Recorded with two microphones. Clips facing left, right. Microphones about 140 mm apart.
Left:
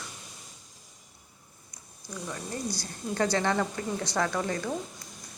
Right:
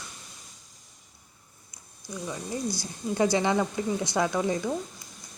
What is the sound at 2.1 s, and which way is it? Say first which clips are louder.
A woman's voice: right 3 dB; 10° right (ahead or behind).